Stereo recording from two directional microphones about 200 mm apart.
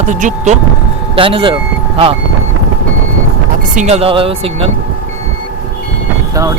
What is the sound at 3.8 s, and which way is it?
Speech, 35° right (ahead or behind).